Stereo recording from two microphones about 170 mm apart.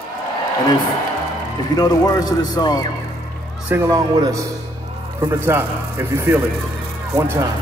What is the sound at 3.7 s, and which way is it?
A man's voice, 20° right (ahead or behind).